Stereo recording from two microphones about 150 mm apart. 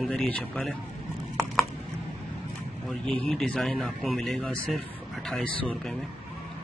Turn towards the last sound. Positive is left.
turn(degrees=5)  # may be behind; listen again after turning